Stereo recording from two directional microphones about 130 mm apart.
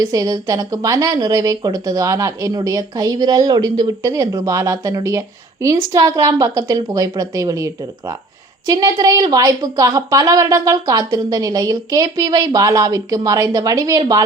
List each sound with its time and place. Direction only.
0.0 s a woman's voice: 25° right (ahead or behind)